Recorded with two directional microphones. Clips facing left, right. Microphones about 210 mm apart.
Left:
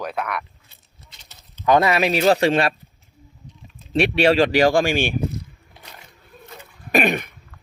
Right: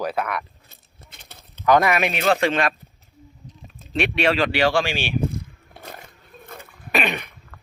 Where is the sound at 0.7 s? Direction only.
50° right (ahead or behind).